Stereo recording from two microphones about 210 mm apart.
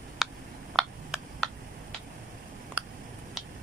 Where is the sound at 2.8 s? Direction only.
5° right (ahead or behind).